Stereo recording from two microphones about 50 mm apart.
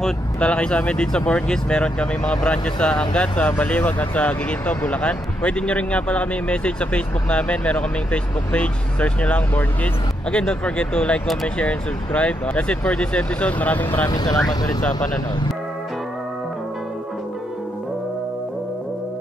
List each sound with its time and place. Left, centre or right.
0.4 s speech: left